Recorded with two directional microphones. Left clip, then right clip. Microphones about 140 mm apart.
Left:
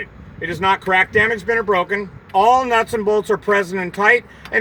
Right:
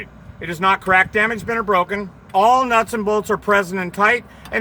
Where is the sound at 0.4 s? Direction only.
5° right (ahead or behind).